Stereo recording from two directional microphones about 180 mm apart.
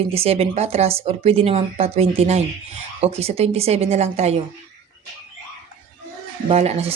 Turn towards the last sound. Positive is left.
turn(degrees=-35)  # may be behind; listen again after turning